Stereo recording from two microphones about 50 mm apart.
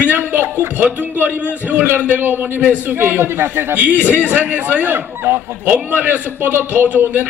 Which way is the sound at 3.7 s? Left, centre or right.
Right.